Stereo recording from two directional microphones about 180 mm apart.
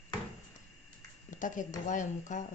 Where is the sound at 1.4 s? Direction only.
45° left (ahead or behind).